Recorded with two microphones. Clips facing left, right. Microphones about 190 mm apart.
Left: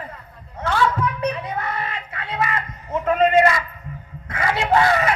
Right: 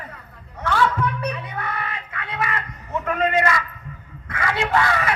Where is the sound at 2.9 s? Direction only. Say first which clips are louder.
Left 5 dB; 25° left (ahead or behind).